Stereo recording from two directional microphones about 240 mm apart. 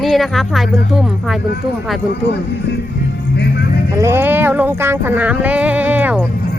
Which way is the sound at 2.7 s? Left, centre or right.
Left.